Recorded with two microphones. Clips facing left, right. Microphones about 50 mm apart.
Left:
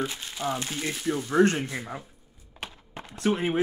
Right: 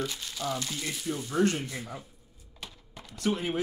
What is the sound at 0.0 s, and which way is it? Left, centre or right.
Speech, left.